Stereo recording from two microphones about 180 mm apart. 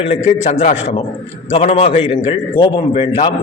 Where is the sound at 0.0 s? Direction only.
35° left (ahead or behind).